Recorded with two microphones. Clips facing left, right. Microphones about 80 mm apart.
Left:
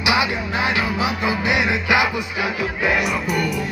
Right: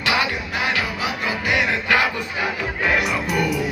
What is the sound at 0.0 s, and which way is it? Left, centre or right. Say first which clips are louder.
Music: left 2 dB; centre.